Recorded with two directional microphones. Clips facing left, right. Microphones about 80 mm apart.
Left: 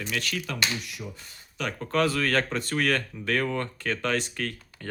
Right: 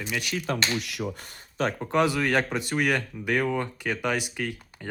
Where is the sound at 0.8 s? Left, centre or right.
Right.